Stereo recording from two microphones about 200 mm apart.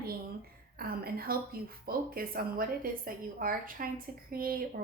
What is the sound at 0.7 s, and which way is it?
A woman's voice, 50° right (ahead or behind).